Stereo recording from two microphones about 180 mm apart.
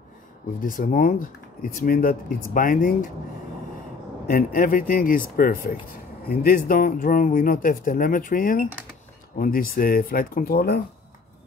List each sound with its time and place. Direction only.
0.6 s speech: 50° left (ahead or behind)
4.3 s speech: 50° left (ahead or behind)